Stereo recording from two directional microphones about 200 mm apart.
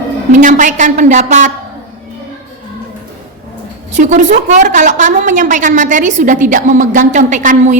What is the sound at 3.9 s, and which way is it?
A woman's voice, 40° right (ahead or behind).